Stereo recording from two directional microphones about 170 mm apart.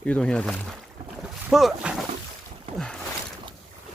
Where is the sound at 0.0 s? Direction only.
5° left (ahead or behind).